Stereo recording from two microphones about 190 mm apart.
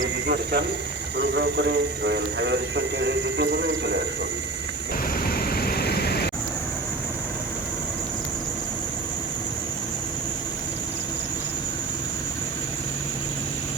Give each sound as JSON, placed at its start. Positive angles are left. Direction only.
{"t": 0.0, "sound": "a sound", "side_deg": -55}
{"t": 1.2, "sound": "a man's voice", "side_deg": -60}
{"t": 5.4, "sound": "vehicle", "side_deg": 55}